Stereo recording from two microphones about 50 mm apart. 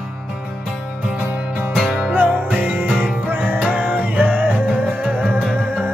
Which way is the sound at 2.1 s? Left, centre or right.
Right.